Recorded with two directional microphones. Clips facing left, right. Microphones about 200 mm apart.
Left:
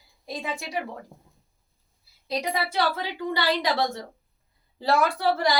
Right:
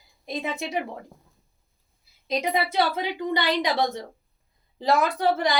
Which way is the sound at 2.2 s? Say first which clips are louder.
Right 3 dB; 20° right (ahead or behind).